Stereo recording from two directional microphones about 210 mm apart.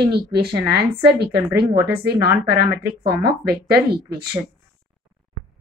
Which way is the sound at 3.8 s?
25° right (ahead or behind).